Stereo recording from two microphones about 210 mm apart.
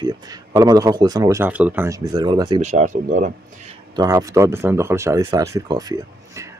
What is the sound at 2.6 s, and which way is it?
Speech, 35° right (ahead or behind).